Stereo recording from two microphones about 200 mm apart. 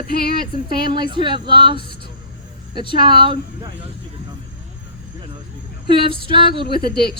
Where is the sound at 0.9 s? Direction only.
25° right (ahead or behind).